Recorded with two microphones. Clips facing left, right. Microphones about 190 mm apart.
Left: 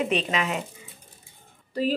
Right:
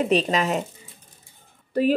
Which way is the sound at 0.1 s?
40° right (ahead or behind).